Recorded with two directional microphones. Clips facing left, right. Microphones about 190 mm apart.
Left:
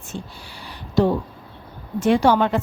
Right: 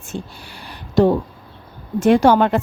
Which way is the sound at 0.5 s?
50° right (ahead or behind).